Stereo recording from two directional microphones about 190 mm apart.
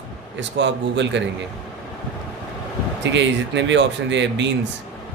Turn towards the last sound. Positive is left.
turn(degrees=-70)  # may be behind; listen again after turning